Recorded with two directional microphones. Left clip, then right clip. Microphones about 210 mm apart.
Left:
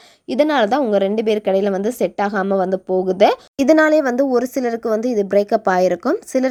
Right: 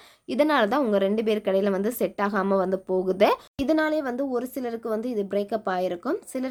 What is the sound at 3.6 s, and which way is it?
Speech, 35° left (ahead or behind).